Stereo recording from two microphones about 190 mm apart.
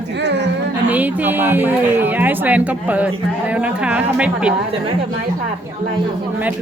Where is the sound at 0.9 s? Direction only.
10° right (ahead or behind).